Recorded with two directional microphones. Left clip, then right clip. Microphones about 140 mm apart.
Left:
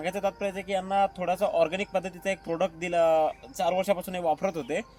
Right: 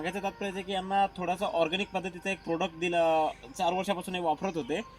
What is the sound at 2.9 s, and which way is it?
Speech, 10° left (ahead or behind).